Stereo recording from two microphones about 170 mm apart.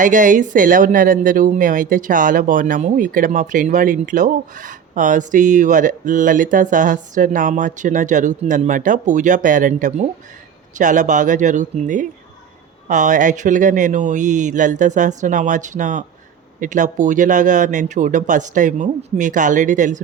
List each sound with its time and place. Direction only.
0.0 s speech: 50° right (ahead or behind)